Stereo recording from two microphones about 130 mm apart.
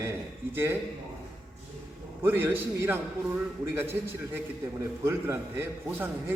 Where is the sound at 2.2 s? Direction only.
15° right (ahead or behind).